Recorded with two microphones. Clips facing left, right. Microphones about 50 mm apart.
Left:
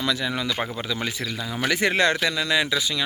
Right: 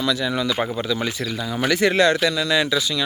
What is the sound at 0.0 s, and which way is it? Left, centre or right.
Speech, left.